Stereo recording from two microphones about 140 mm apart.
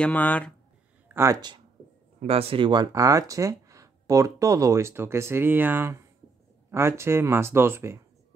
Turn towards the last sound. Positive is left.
turn(degrees=-20)  # may be behind; listen again after turning